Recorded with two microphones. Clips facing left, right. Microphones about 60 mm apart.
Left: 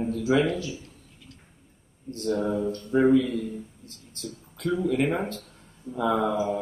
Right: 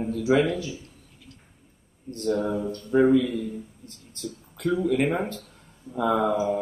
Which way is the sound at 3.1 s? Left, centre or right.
Right.